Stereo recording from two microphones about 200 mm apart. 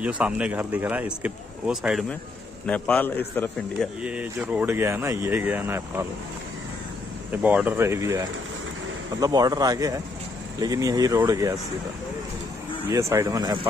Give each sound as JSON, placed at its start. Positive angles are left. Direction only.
{"t": 0.0, "sound": "a man's voice", "side_deg": -5}
{"t": 3.7, "sound": "speech", "side_deg": -5}
{"t": 7.4, "sound": "a man's voice", "side_deg": -10}
{"t": 12.9, "sound": "speech", "side_deg": -15}